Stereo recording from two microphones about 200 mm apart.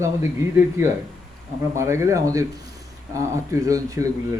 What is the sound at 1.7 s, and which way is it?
Speech, 15° right (ahead or behind).